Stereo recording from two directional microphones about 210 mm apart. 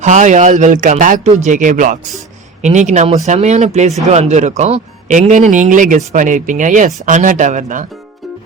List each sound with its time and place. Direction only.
0.0 s speech: 35° right (ahead or behind)